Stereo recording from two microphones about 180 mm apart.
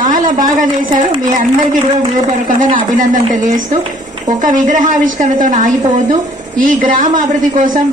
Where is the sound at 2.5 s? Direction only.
45° right (ahead or behind).